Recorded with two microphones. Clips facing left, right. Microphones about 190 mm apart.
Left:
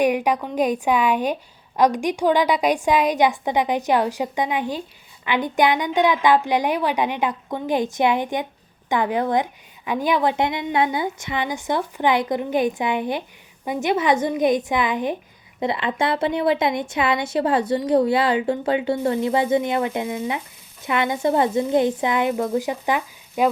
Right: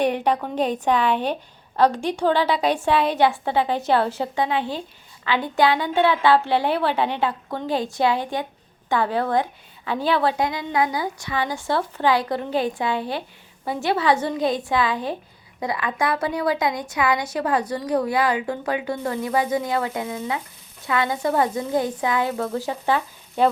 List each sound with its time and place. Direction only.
0.0 s a woman's voice: 10° left (ahead or behind)